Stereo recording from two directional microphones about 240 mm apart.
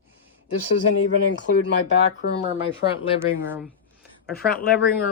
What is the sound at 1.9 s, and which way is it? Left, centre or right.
Speech, left.